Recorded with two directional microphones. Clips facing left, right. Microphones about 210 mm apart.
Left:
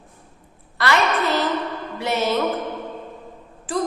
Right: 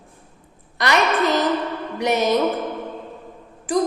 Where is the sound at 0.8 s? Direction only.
15° right (ahead or behind).